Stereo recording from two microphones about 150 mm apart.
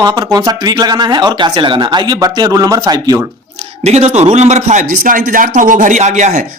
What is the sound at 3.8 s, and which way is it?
Speech, 45° right (ahead or behind).